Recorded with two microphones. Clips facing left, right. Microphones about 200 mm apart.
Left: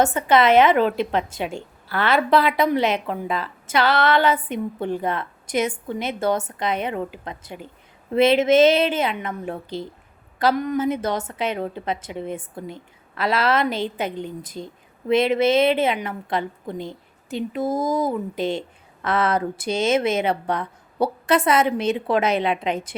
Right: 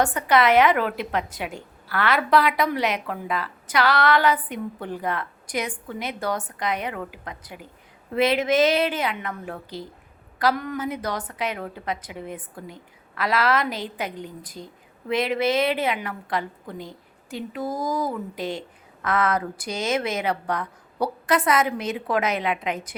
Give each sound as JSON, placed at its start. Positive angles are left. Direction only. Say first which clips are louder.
{"t": 0.0, "sound": "a woman's voice", "louder": "left 3 dB", "side_deg": 25}